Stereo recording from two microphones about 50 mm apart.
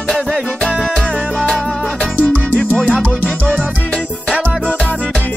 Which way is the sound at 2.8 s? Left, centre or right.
Left.